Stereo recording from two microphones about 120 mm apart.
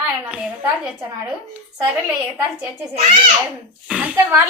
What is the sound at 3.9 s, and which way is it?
Speech, 10° right (ahead or behind).